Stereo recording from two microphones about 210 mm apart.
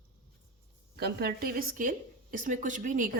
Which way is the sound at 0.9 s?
50° right (ahead or behind).